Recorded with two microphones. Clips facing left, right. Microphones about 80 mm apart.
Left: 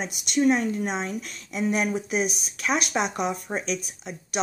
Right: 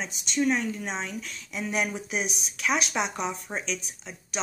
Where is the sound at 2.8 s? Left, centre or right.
Left.